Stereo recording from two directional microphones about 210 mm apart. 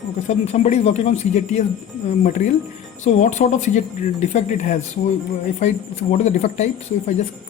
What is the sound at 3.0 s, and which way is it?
Speech, 35° left (ahead or behind).